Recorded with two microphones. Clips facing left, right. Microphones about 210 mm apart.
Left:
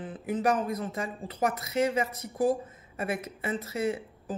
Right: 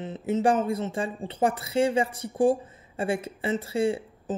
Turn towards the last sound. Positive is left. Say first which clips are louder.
# right 4 dB
turn(degrees=-30)  # may be behind; listen again after turning